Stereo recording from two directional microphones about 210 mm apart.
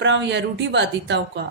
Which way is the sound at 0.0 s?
55° right (ahead or behind).